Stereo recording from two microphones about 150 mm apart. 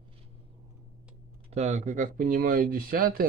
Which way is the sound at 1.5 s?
50° right (ahead or behind).